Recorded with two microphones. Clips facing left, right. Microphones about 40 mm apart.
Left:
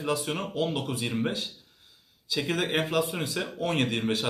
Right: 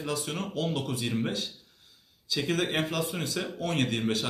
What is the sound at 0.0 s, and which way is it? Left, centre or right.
Speech, centre.